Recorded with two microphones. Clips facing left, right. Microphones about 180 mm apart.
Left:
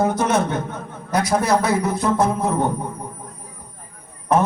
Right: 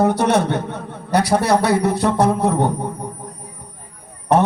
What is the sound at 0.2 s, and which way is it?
A man's voice, 70° right (ahead or behind).